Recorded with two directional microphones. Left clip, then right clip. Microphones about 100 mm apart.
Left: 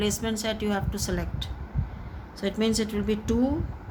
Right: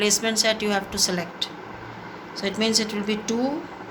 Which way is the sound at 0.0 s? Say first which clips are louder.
Right 7 dB; 55° left (ahead or behind).